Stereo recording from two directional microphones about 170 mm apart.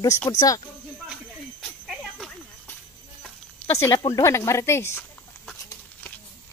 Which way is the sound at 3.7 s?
20° left (ahead or behind).